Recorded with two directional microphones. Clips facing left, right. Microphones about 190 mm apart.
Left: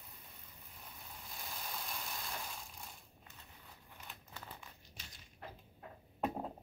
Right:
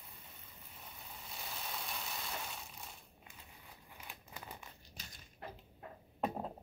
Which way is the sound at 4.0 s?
10° right (ahead or behind).